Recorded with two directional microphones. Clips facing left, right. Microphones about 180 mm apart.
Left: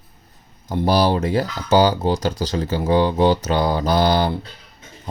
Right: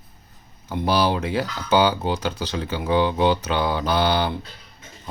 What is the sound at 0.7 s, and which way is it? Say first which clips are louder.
Speech: left 3 dB; 40° left (ahead or behind).